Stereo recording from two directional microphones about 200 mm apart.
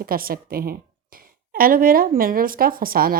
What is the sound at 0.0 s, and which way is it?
A woman's voice, 45° right (ahead or behind).